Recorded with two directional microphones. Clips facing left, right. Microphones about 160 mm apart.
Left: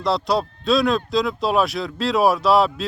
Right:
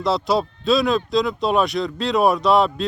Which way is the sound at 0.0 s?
Centre (ahead or behind).